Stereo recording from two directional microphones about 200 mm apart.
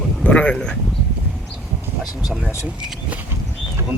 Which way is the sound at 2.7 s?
5° right (ahead or behind).